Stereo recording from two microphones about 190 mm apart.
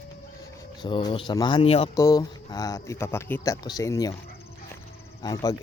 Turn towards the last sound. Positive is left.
turn(degrees=20)  # may be behind; listen again after turning